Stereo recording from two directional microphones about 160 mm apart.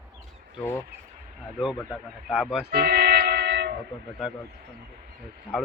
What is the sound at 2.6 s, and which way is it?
Train, 75° right (ahead or behind).